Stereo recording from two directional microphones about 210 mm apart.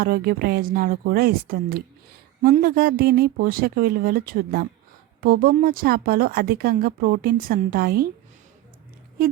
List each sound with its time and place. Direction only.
0.0 s speech: 45° right (ahead or behind)